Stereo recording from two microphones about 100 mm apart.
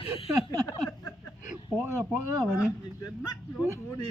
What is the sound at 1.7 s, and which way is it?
Speech, 20° right (ahead or behind).